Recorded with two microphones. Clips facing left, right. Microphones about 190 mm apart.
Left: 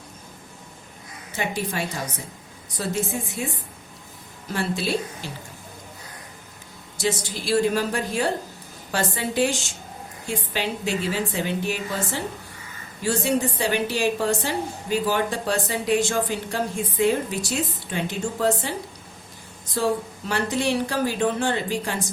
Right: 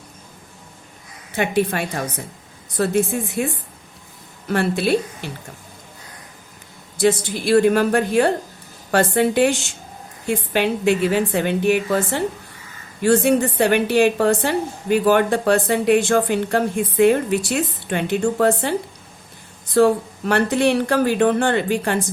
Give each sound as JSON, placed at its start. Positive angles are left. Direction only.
{"t": 1.4, "sound": "a woman's voice", "side_deg": -60}
{"t": 4.4, "sound": "a woman's voice", "side_deg": -60}
{"t": 6.9, "sound": "a woman's voice", "side_deg": -60}
{"t": 19.7, "sound": "a woman's voice", "side_deg": -60}